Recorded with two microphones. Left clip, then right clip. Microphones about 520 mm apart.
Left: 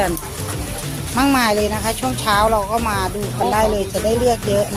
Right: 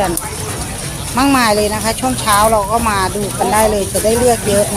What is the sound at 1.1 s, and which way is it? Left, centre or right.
Speech, left.